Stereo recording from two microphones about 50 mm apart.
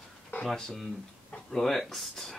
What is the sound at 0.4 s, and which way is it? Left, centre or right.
Speech, centre.